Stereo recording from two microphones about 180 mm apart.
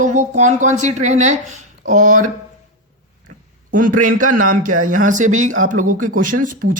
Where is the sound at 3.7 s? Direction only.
45° right (ahead or behind).